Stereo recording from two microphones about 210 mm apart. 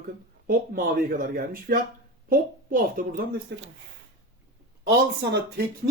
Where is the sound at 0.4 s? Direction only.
40° right (ahead or behind).